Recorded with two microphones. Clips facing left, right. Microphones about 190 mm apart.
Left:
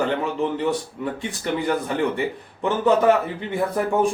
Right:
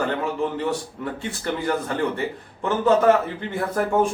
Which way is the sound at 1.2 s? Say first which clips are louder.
Left 1 dB; 15° left (ahead or behind).